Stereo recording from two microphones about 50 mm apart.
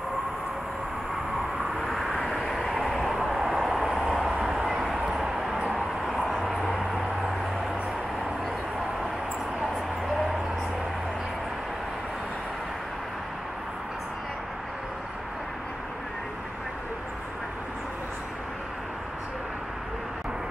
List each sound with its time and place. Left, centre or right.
1.8 s vehicle: centre
4.9 s a sound: centre
5.7 s vehicle: centre